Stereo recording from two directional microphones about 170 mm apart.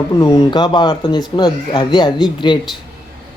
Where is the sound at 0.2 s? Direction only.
20° left (ahead or behind).